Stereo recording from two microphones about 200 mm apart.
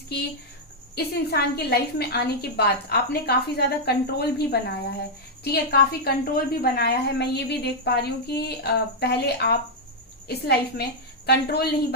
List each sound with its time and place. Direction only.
0.9 s a woman's voice: 55° left (ahead or behind)